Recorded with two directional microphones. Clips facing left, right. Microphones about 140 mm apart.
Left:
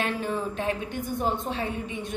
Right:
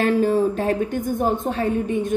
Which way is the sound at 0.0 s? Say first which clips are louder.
Right 11 dB; 40° right (ahead or behind).